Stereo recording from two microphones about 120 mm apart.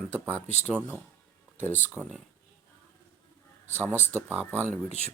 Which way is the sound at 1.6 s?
15° left (ahead or behind).